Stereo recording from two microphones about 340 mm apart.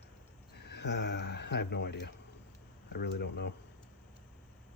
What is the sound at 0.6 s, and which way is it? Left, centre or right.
Speech, left.